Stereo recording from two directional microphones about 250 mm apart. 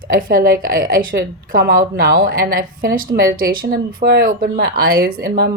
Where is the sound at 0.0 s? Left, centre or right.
Right.